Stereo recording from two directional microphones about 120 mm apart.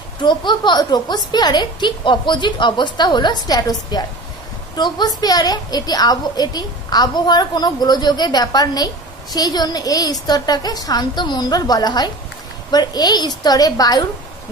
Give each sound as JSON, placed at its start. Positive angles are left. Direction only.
{"t": 0.2, "sound": "a woman's voice", "side_deg": 40}